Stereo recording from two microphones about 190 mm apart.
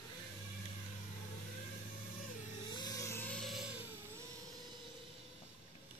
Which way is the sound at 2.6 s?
20° left (ahead or behind).